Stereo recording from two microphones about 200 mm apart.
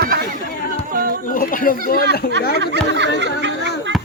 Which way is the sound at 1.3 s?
45° left (ahead or behind).